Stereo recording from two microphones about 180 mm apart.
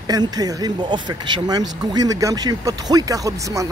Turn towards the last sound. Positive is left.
turn(degrees=-15)  # may be behind; listen again after turning